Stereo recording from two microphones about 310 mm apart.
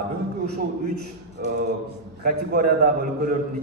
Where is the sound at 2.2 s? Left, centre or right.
Right.